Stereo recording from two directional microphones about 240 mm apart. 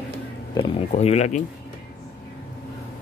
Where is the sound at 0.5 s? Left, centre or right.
Left.